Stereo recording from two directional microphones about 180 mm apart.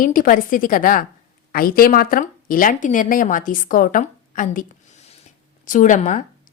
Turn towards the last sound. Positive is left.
turn(degrees=45)  # may be behind; listen again after turning